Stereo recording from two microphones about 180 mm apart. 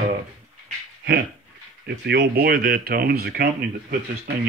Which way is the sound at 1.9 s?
60° right (ahead or behind).